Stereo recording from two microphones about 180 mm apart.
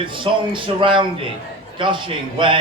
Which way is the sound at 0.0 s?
30° right (ahead or behind).